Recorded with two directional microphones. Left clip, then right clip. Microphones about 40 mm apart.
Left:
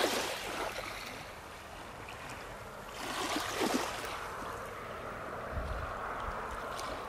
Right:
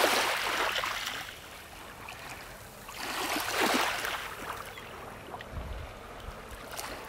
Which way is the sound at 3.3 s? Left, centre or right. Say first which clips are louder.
Right 6 dB; right.